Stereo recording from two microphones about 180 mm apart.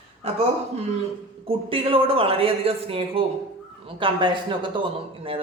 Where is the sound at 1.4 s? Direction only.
30° right (ahead or behind).